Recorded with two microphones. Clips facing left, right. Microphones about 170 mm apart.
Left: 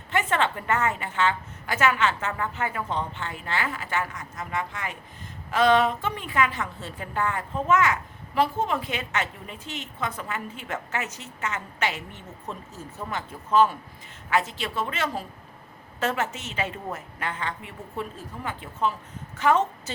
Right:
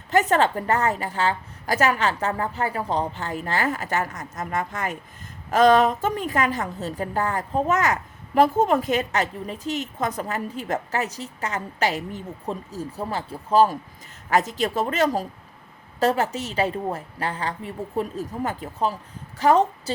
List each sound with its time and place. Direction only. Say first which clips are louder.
0.1 s a woman's voice: right 6 dB; 40° right (ahead or behind)